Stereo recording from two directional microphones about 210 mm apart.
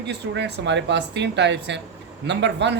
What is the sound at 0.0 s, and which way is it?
Speech, 55° right (ahead or behind).